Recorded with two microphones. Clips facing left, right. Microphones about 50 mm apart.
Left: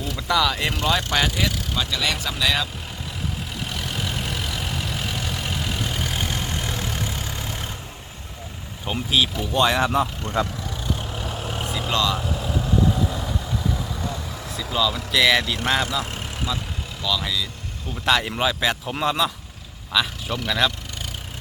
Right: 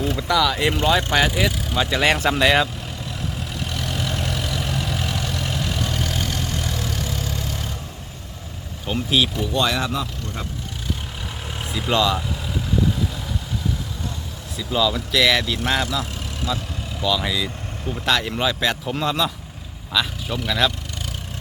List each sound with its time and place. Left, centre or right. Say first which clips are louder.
0.2 s speech: even; centre
0.7 s speech: right 3 dB; centre
2.0 s speech: right 10 dB; right
3.6 s vehicle: right 2 dB; centre
6.1 s vehicle: right 1 dB; left
8.9 s speech: right 1 dB; centre
9.5 s speech: left 2 dB; centre
10.4 s speech: left 11 dB; left
11.9 s speech: right 4 dB; centre
14.5 s speech: right 2 dB; centre
17.0 s speech: right 3 dB; centre
18.0 s speech: left 1 dB; centre